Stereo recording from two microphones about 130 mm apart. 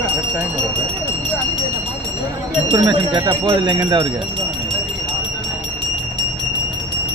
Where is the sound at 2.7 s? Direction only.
25° right (ahead or behind).